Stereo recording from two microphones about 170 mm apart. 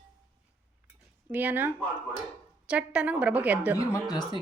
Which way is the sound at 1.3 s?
10° right (ahead or behind).